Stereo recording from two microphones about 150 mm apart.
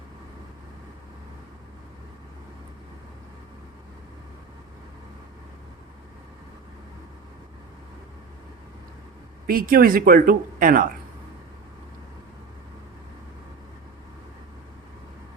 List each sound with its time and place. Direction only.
9.5 s speech: 75° right (ahead or behind)